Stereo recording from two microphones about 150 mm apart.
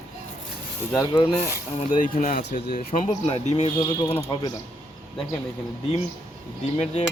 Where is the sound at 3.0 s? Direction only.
45° left (ahead or behind).